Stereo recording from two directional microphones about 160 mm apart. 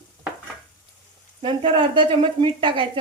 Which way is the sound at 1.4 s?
30° right (ahead or behind).